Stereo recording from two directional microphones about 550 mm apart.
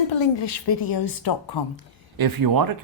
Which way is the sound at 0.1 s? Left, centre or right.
Left.